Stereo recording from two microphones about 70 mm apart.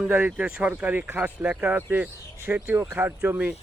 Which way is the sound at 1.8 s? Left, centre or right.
Right.